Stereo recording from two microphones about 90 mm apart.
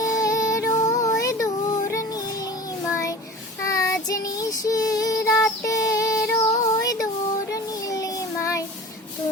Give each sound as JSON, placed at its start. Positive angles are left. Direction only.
{"t": 0.0, "sound": "music", "side_deg": 40}
{"t": 2.9, "sound": "child singing", "side_deg": 35}